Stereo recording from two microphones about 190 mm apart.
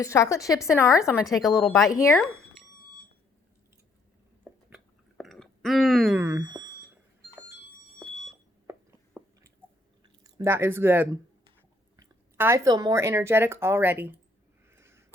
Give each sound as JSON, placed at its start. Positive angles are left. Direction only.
{"t": 0.0, "sound": "a woman's voice", "side_deg": 15}
{"t": 1.2, "sound": "a woman's voice", "side_deg": 0}
{"t": 1.5, "sound": "a woman's voice", "side_deg": 15}
{"t": 4.7, "sound": "chewing", "side_deg": 0}
{"t": 9.2, "sound": "chewing", "side_deg": 5}
{"t": 10.2, "sound": "speech", "side_deg": -15}
{"t": 14.7, "sound": "sniff", "side_deg": -15}